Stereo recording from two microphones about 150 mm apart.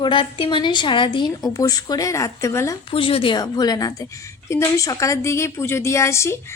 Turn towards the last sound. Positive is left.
turn(degrees=20)  # may be behind; listen again after turning